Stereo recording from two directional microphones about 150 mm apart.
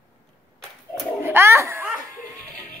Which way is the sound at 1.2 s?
15° right (ahead or behind).